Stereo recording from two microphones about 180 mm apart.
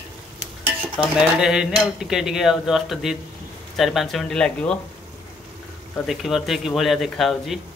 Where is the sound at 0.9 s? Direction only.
Centre (ahead or behind).